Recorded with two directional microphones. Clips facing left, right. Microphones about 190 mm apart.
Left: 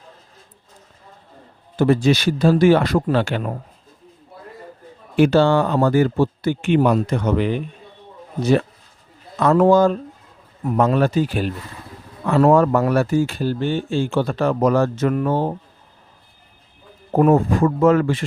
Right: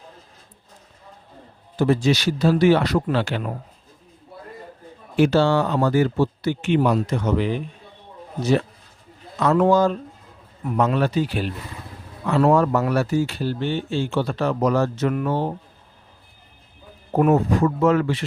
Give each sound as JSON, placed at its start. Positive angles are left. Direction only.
{"t": 1.8, "sound": "speech", "side_deg": 55}
{"t": 5.1, "sound": "speech", "side_deg": 55}
{"t": 9.4, "sound": "speech", "side_deg": 50}
{"t": 17.3, "sound": "speech", "side_deg": 50}